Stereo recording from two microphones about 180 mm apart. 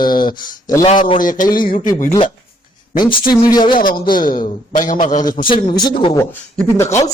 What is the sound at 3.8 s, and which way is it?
A man's voice, 50° left (ahead or behind).